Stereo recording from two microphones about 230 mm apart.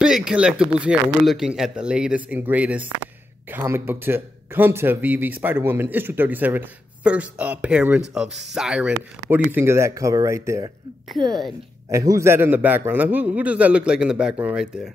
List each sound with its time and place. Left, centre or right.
0.0 s speech: centre